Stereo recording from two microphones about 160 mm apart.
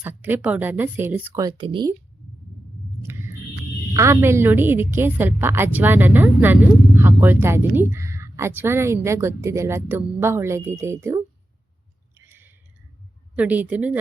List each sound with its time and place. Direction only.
0.0 s a woman's voice: 15° right (ahead or behind)
1.5 s speech: 30° right (ahead or behind)
3.0 s a sound: 15° right (ahead or behind)
3.9 s a woman's voice: 15° right (ahead or behind)
12.1 s a sound: 15° right (ahead or behind)
13.3 s a woman's voice: 10° right (ahead or behind)